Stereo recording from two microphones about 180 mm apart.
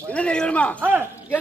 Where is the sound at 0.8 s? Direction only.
10° right (ahead or behind).